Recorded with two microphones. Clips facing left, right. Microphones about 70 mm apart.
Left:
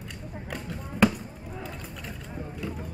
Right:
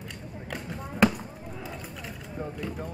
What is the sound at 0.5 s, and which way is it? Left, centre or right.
Basketball bounce, centre.